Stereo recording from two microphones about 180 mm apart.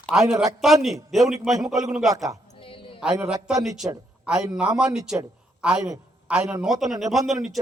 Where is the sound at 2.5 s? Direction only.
30° left (ahead or behind).